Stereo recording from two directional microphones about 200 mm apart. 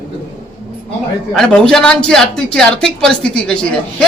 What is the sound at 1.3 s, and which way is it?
A man's voice, 5° left (ahead or behind).